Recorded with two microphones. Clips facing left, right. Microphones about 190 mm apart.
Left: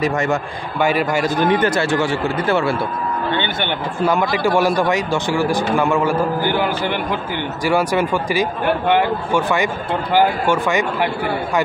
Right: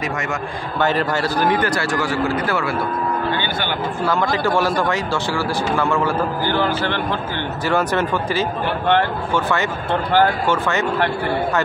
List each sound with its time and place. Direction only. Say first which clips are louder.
0.7 s a man's voice: left 2 dB; 10° left (ahead or behind)
1.4 s a man's voice: left 3 dB; 20° left (ahead or behind)